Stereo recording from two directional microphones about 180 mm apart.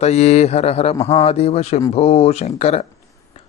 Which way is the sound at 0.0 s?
35° left (ahead or behind).